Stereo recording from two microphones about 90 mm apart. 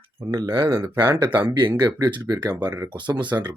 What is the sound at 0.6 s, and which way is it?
Speech, 25° right (ahead or behind).